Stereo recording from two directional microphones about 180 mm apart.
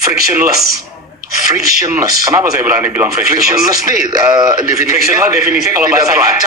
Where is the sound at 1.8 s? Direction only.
15° right (ahead or behind).